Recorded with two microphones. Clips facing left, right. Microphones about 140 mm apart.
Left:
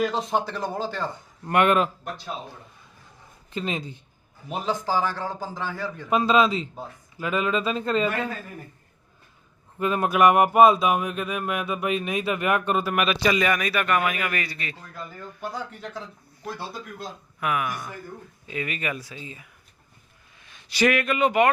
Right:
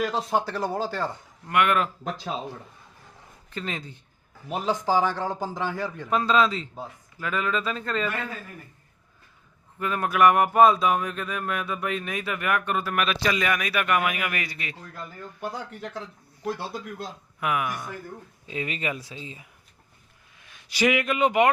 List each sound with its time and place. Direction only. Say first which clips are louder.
0.0 s a man's voice: left 1 dB; 5° right (ahead or behind)
1.5 s speech: left 3 dB; 30° left (ahead or behind)
3.5 s speech: left 4 dB; 20° left (ahead or behind)
4.6 s a man's voice: right 2 dB; 15° right (ahead or behind)
6.1 s speech: left 2 dB; 15° left (ahead or behind)
9.7 s speech: left 3 dB; 20° left (ahead or behind)
12.8 s a man's voice: left 3 dB; 10° left (ahead or behind); by 14.8 s 15° right (ahead or behind)
17.4 s speech: even; 20° right (ahead or behind)
20.4 s a man's voice: left 1 dB; 10° right (ahead or behind)